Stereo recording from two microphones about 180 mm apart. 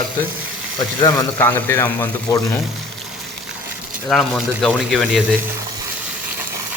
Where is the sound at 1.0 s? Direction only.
15° left (ahead or behind).